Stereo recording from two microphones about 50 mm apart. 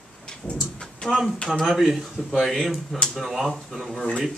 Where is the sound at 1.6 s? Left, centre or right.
Centre.